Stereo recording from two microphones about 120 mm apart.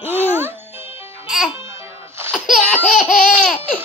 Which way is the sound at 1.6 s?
20° right (ahead or behind).